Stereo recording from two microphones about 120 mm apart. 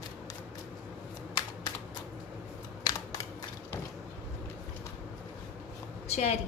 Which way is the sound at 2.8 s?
30° left (ahead or behind).